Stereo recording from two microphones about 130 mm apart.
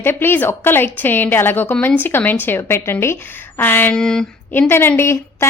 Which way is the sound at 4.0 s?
5° left (ahead or behind).